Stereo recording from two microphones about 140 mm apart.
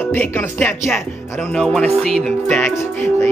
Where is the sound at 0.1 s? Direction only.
10° left (ahead or behind).